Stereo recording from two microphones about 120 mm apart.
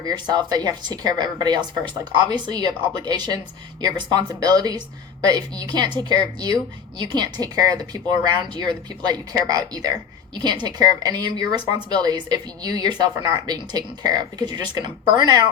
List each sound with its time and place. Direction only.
0.0 s a woman's voice: 35° right (ahead or behind)